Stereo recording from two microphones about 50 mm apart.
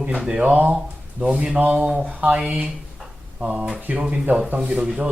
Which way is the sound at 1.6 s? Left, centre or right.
Right.